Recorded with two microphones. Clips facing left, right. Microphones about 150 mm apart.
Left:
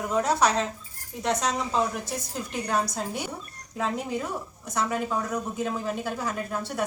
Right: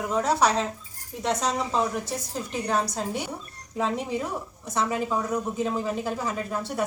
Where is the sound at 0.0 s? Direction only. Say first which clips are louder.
Even; centre (ahead or behind).